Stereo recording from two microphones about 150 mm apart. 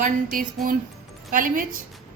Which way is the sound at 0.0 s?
70° right (ahead or behind).